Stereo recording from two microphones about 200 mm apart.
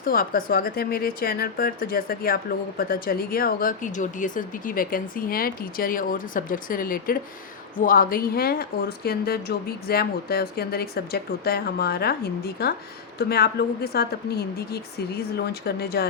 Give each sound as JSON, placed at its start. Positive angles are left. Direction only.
{"t": 0.0, "sound": "speech", "side_deg": 45}